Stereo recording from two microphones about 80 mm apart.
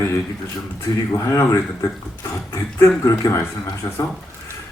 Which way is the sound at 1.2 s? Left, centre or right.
Left.